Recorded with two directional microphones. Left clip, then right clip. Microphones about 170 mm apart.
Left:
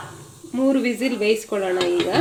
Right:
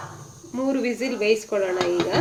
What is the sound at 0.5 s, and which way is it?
Speech, 25° left (ahead or behind).